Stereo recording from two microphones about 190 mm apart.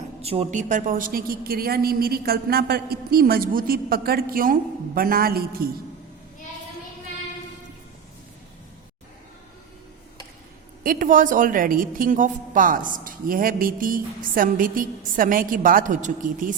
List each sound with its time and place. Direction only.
0.2 s a woman's voice: 30° right (ahead or behind); by 5.6 s 50° right (ahead or behind)
10.8 s a woman's voice: 45° right (ahead or behind)